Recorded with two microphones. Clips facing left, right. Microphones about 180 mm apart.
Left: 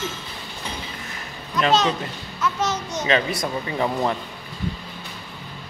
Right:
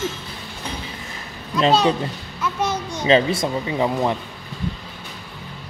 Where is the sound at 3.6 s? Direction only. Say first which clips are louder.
Right 1 dB; 15° right (ahead or behind).